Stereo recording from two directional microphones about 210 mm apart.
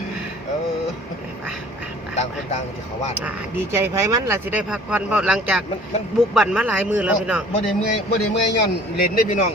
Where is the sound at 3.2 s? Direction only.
10° right (ahead or behind).